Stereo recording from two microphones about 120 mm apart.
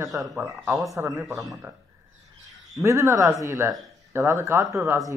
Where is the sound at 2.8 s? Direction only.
25° right (ahead or behind).